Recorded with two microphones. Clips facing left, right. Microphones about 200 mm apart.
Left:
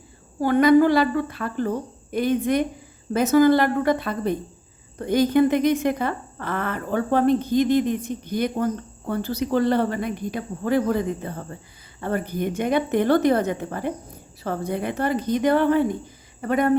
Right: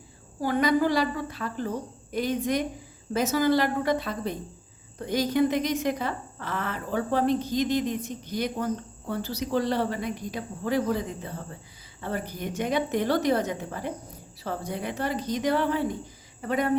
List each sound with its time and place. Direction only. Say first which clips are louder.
0.4 s speech: left 8 dB; 55° left (ahead or behind)